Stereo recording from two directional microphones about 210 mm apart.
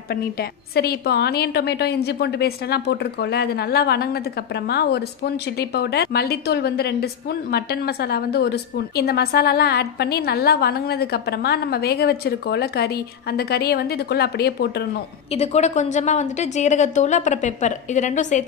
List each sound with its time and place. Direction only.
0.1 s a woman's voice: 50° left (ahead or behind)
15.3 s a woman's voice: 30° left (ahead or behind)